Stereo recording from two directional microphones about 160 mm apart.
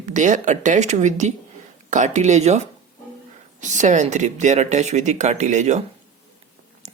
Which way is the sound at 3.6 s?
50° right (ahead or behind).